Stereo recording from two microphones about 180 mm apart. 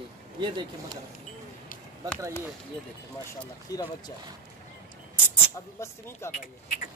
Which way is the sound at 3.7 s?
20° left (ahead or behind).